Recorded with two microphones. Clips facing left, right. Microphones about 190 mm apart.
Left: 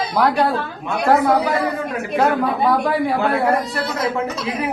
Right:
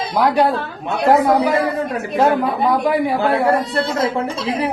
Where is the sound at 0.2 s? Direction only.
15° right (ahead or behind).